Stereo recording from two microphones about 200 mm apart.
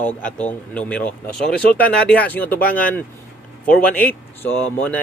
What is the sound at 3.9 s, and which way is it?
Speech, 10° left (ahead or behind).